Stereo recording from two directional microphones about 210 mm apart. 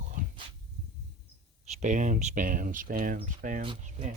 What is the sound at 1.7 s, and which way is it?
Speech, 35° right (ahead or behind).